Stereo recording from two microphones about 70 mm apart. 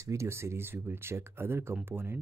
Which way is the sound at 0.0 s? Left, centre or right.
Right.